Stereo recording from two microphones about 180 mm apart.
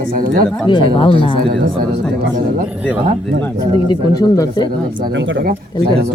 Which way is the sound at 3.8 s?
20° left (ahead or behind).